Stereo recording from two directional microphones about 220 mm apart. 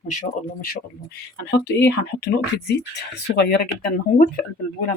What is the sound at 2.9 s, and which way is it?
Speech, 50° left (ahead or behind).